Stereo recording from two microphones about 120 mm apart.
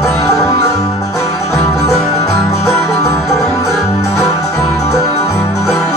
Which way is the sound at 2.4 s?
25° left (ahead or behind).